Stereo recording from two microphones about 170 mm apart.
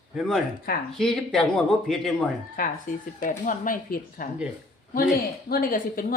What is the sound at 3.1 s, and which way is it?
Speech, 50° left (ahead or behind).